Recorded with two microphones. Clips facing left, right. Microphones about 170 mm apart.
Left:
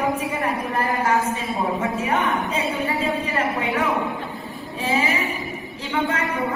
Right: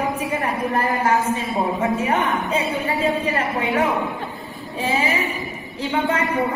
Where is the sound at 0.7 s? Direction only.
30° right (ahead or behind).